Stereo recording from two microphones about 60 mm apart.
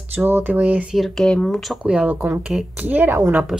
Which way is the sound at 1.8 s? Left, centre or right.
Right.